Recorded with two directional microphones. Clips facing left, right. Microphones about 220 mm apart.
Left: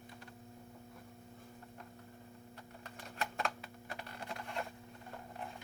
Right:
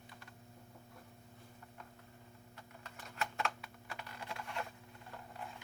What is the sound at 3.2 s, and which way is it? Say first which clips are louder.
Typewriter: left 1 dB; 35° left (ahead or behind).